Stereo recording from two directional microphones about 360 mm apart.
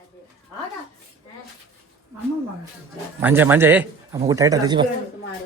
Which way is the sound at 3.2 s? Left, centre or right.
Centre.